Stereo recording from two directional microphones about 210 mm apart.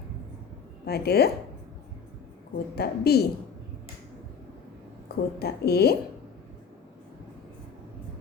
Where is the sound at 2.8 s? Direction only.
50° left (ahead or behind).